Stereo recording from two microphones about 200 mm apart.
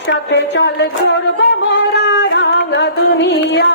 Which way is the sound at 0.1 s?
60° left (ahead or behind).